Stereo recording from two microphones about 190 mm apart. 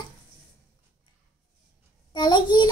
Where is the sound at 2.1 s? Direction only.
20° left (ahead or behind).